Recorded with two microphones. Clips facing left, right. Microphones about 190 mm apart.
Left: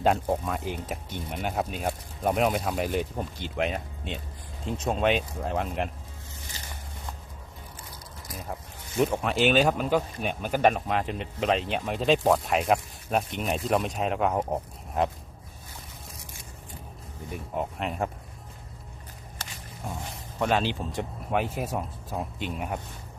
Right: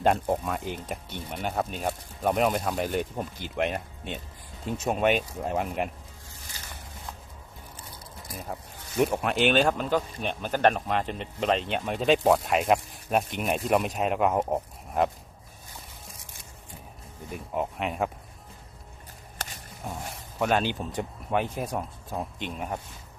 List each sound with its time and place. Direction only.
0.0 s speech: centre (ahead or behind)
9.0 s speech: 5° right (ahead or behind)
17.3 s speech: centre (ahead or behind)
20.4 s speech: centre (ahead or behind)